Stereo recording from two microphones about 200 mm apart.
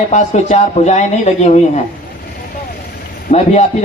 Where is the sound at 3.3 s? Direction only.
35° left (ahead or behind).